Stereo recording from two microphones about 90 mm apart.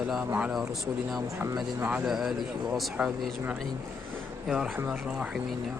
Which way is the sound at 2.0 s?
Centre (ahead or behind).